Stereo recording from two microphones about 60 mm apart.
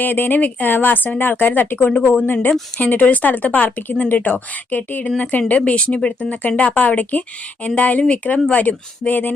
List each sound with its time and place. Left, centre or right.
0.0 s speech: left